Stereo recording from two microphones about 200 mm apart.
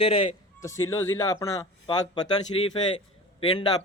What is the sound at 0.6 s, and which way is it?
A man's voice, 15° left (ahead or behind).